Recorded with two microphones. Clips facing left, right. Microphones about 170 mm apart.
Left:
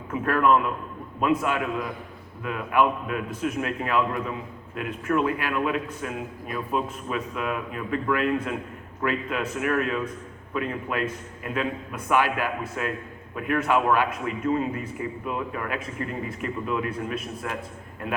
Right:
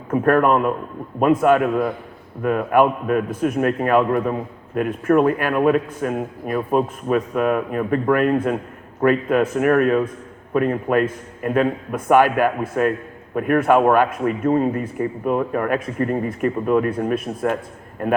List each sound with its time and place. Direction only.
0.1 s a man's voice: 45° right (ahead or behind)